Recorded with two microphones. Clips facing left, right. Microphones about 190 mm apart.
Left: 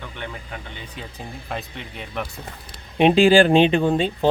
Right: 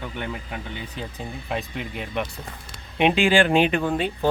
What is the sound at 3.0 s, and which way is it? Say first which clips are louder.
Speech: left 5 dB; 35° left (ahead or behind).